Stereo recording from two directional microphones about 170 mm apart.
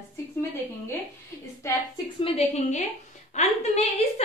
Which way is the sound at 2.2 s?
40° left (ahead or behind).